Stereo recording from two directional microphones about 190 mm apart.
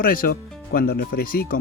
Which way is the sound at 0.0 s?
50° left (ahead or behind).